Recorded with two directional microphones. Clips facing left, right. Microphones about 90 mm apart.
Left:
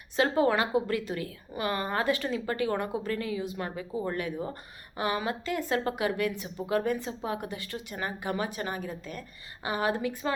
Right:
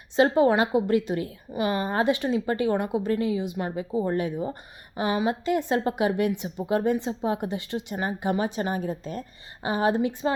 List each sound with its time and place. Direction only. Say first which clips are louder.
0.2 s a woman's voice: right 5 dB; 25° right (ahead or behind)